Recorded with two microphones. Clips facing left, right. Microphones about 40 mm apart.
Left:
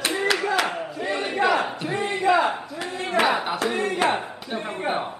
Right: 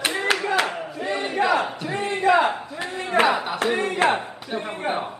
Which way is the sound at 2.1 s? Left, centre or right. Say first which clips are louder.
Right 2 dB; right.